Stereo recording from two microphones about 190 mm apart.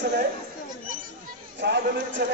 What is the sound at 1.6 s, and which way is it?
Speech, 65° right (ahead or behind).